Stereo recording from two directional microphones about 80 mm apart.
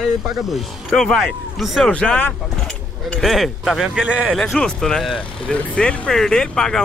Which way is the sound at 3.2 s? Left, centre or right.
Centre.